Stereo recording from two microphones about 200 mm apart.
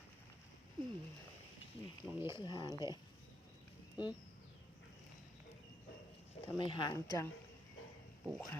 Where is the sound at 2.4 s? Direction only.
20° left (ahead or behind).